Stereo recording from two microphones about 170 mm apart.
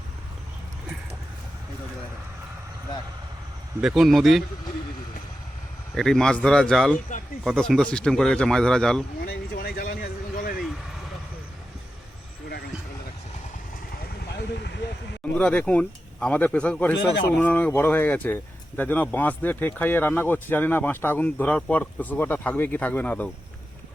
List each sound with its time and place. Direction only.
3.8 s speech: centre (ahead or behind)
5.9 s speech: centre (ahead or behind)
9.2 s a sound: 65° left (ahead or behind)
14.3 s vehicle: 80° left
15.4 s speech: 5° left (ahead or behind)